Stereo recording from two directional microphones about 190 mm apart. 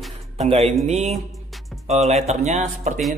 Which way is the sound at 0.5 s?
30° right (ahead or behind).